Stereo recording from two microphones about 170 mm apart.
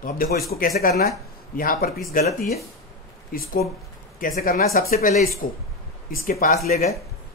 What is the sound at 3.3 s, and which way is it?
Speech, 55° left (ahead or behind).